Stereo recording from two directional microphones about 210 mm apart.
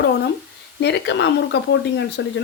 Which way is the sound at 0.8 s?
55° left (ahead or behind).